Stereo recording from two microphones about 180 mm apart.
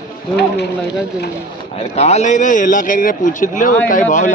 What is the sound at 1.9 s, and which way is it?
A man's voice, 40° left (ahead or behind).